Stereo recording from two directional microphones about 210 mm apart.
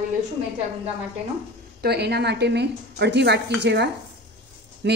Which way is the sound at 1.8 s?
50° right (ahead or behind).